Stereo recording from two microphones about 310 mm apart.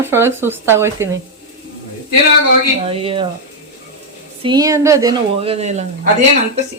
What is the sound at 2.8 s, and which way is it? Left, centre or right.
Speech, centre.